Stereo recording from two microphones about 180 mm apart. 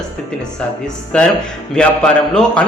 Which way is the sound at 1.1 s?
5° left (ahead or behind).